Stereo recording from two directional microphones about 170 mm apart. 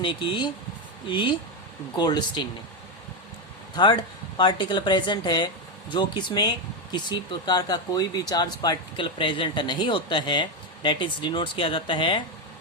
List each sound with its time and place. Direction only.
0.0 s speech: 30° left (ahead or behind)
3.8 s speech: 25° left (ahead or behind)